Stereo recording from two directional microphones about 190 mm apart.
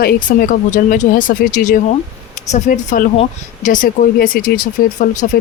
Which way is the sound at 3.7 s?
45° left (ahead or behind).